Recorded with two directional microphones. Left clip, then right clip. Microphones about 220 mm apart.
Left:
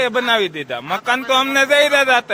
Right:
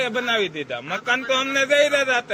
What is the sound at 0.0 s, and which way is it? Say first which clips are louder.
A man's voice: left 6 dB; 40° left (ahead or behind).